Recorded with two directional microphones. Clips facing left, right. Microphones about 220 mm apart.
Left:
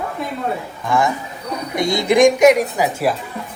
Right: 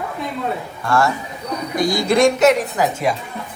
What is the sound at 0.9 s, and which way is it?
Speech, 15° left (ahead or behind).